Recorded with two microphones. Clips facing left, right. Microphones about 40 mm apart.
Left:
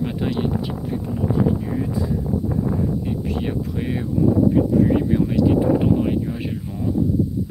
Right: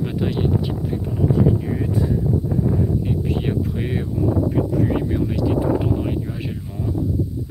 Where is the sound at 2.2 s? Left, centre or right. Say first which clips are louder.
Right 1 dB; centre.